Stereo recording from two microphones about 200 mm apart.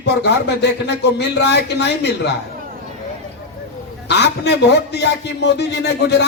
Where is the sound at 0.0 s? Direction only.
60° left (ahead or behind).